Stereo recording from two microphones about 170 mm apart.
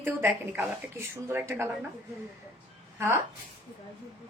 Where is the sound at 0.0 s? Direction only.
15° right (ahead or behind).